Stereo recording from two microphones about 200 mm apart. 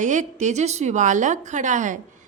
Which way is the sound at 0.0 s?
40° right (ahead or behind).